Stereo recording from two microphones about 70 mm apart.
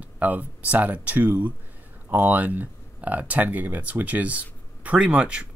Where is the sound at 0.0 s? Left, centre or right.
Right.